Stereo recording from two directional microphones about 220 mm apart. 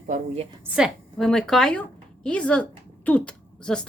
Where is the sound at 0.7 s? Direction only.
Centre (ahead or behind).